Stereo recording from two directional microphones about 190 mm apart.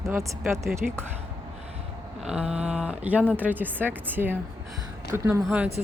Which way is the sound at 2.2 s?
5° right (ahead or behind).